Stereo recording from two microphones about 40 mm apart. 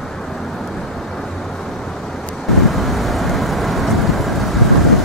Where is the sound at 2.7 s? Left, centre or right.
Centre.